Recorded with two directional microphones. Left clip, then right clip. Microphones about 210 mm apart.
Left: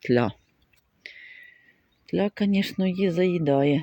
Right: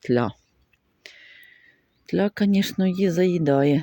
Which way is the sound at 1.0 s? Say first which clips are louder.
Left 2 dB; 15° right (ahead or behind).